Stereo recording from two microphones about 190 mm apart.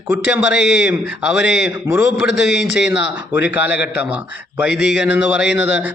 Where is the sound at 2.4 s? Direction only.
65° left (ahead or behind).